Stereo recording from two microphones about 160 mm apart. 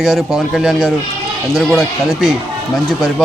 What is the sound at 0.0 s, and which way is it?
A man's voice, centre (ahead or behind).